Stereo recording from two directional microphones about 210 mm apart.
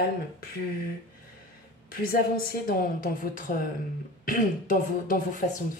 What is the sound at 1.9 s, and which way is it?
Speech, 45° left (ahead or behind).